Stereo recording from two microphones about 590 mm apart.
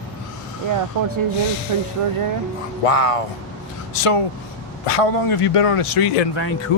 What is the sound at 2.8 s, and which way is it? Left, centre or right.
Speech, left.